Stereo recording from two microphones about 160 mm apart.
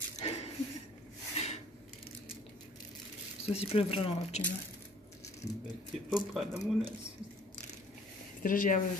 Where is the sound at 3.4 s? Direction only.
40° left (ahead or behind).